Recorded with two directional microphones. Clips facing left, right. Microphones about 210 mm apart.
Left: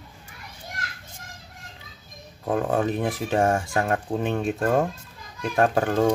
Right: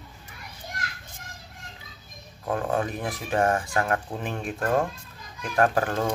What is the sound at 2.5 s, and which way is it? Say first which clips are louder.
Speech: left 3 dB; 30° left (ahead or behind).